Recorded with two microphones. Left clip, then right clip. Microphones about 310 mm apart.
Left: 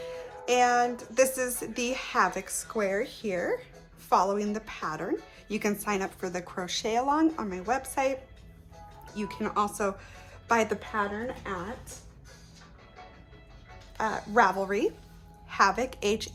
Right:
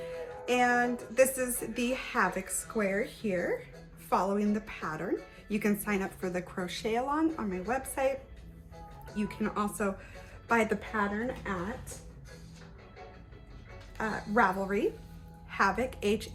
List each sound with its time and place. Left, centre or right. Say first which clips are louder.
0.0 s music: left 1 dB; centre
1.1 s a woman's voice: even; centre
9.1 s a woman's voice: left 4 dB; centre
14.0 s speech: left 4 dB; centre